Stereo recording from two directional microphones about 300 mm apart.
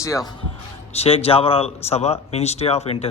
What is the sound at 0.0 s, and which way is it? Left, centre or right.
Speech, centre.